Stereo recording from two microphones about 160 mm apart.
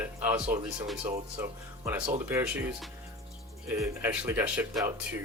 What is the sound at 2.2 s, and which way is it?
Speech, 15° right (ahead or behind).